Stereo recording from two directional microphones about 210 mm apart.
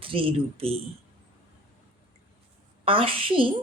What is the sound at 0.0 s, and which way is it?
Speech, 25° right (ahead or behind).